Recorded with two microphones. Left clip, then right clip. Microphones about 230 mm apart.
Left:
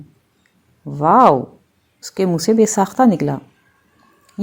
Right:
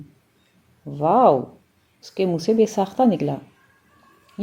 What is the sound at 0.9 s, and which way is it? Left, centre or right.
Speech, left.